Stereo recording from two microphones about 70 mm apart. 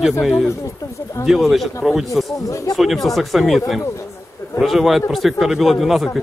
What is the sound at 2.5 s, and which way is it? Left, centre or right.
Speech, left.